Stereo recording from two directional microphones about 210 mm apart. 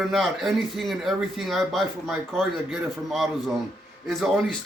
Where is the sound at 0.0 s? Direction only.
Centre (ahead or behind).